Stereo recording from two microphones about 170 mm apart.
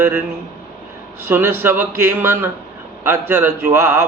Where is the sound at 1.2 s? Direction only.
15° right (ahead or behind).